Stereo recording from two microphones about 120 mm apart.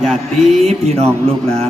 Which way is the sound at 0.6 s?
65° right (ahead or behind).